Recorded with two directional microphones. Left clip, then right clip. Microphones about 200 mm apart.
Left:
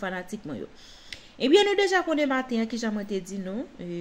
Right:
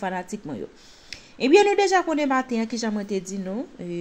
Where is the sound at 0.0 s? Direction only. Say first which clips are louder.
Right 4 dB; 15° right (ahead or behind).